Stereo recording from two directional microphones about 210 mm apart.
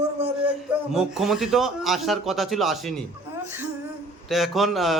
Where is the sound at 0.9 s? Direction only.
Centre (ahead or behind).